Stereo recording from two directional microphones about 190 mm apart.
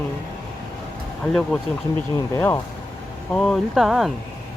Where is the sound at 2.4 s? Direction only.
10° left (ahead or behind).